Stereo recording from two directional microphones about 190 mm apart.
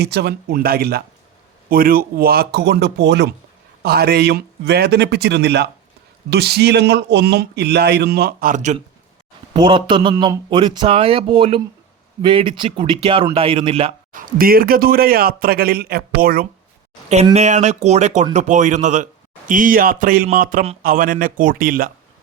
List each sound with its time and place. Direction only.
0.0 s a man's voice: 60° right (ahead or behind); by 8.8 s 40° right (ahead or behind)
9.5 s speech: 25° right (ahead or behind)
14.1 s a man's voice: 45° right (ahead or behind)
17.3 s a man's voice: 40° right (ahead or behind)